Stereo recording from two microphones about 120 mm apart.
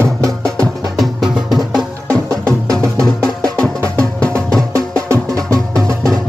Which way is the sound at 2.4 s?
25° right (ahead or behind).